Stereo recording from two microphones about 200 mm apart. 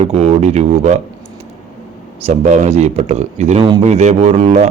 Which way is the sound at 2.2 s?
35° right (ahead or behind).